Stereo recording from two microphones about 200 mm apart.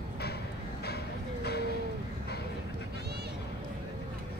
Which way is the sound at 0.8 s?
55° left (ahead or behind).